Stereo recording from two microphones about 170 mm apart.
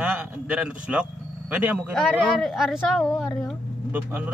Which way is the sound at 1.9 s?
Centre (ahead or behind).